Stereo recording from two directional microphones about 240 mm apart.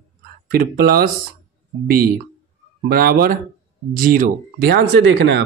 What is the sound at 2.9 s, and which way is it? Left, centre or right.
A man's voice, right.